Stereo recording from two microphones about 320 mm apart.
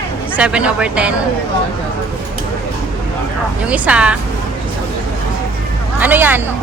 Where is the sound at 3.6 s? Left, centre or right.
Centre.